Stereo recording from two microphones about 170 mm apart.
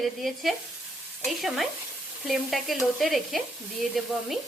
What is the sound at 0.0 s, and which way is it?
Speech, centre (ahead or behind).